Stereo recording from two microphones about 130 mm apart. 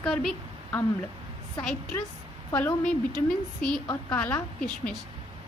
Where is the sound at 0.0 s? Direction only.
5° left (ahead or behind).